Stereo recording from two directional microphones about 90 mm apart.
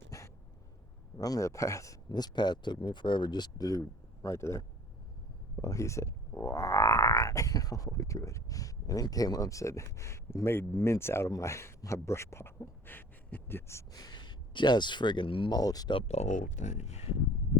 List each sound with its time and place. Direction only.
1.2 s speech: 40° left (ahead or behind)
2.0 s speech: 50° left (ahead or behind); by 13.8 s 30° left (ahead or behind)
13.9 s speech: 50° left (ahead or behind); by 15.5 s 70° left (ahead or behind)
15.5 s speech: 45° left (ahead or behind)